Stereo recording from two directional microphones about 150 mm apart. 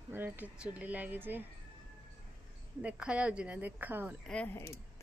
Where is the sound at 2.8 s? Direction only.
5° right (ahead or behind).